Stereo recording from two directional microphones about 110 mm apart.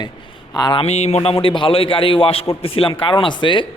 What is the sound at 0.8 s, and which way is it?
A man's voice, 75° left (ahead or behind).